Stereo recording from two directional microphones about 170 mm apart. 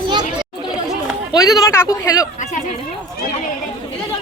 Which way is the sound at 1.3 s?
20° left (ahead or behind).